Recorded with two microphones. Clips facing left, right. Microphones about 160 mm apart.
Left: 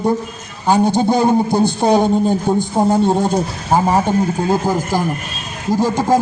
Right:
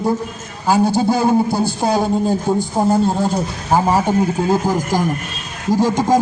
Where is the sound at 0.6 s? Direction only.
5° right (ahead or behind).